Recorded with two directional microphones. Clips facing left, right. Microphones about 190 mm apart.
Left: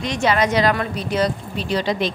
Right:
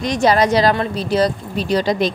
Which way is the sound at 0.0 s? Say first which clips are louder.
Right 4 dB; 40° right (ahead or behind).